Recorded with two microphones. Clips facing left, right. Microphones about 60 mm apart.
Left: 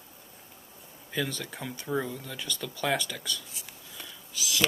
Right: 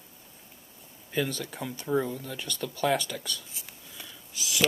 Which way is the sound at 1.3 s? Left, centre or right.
Centre.